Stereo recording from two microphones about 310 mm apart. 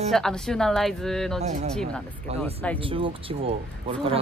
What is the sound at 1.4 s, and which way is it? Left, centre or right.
Speech, right.